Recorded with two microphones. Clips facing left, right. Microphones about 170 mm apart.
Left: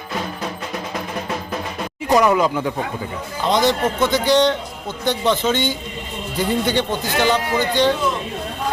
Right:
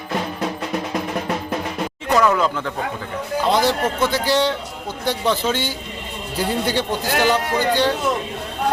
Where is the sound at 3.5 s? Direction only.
10° right (ahead or behind).